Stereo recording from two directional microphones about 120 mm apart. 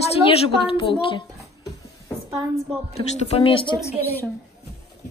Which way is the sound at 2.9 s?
60° left (ahead or behind).